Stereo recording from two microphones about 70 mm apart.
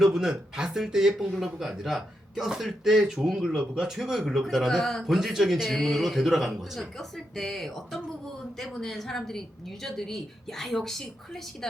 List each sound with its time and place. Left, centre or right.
0.0 s a man's voice: centre